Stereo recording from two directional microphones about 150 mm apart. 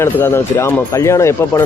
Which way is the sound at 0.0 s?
15° left (ahead or behind).